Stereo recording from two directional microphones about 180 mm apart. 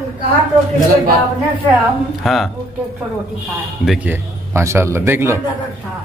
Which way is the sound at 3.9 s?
10° right (ahead or behind).